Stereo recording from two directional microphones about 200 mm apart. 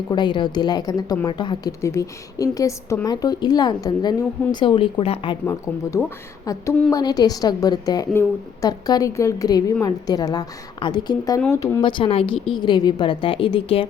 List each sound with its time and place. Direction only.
0.1 s a woman's voice: 25° left (ahead or behind)